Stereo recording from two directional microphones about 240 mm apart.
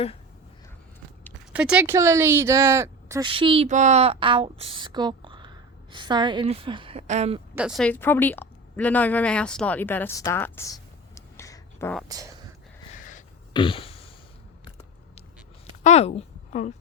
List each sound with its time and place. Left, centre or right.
1.5 s speech: centre; by 7.4 s right
7.5 s a woman's voice: centre
12.0 s speech: centre
12.9 s a sound: left
13.5 s a sound: left
15.8 s a woman's voice: left